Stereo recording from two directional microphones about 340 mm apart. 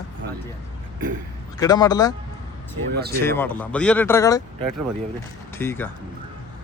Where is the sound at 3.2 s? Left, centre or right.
Centre.